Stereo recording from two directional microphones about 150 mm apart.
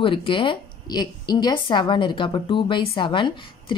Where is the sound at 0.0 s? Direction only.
35° left (ahead or behind).